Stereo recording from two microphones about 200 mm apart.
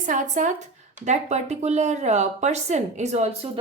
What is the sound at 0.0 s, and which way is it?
Speech, 40° right (ahead or behind).